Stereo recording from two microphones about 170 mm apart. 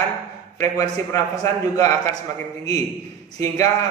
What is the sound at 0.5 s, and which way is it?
A man's voice, 20° left (ahead or behind).